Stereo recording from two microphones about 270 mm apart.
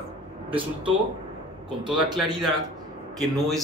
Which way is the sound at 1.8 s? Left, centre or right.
Centre.